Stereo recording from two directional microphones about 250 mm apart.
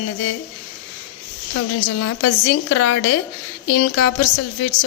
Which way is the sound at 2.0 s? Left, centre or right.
Left.